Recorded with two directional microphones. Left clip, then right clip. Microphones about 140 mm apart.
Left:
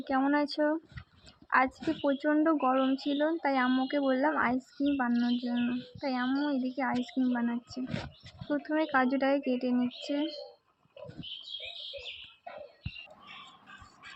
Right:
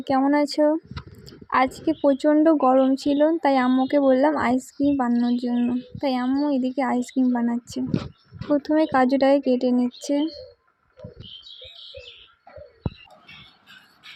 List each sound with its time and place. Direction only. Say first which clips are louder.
0.0 s a woman's voice: right 8 dB; 55° right (ahead or behind)
2.0 s speech: right 10 dB; 70° right (ahead or behind)